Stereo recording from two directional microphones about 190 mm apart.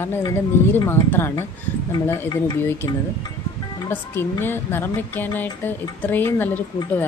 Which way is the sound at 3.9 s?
10° left (ahead or behind).